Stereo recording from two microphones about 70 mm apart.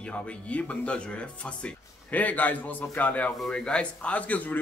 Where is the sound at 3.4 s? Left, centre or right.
Centre.